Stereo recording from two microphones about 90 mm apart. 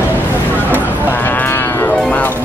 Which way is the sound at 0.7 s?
20° left (ahead or behind).